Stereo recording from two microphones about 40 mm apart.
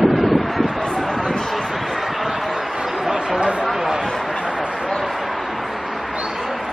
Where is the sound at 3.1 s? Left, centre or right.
Right.